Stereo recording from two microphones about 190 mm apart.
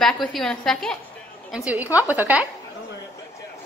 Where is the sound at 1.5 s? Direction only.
10° right (ahead or behind).